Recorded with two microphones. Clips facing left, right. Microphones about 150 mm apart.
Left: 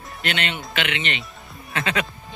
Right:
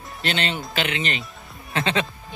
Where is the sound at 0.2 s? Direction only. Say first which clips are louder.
Right 1 dB; 35° right (ahead or behind).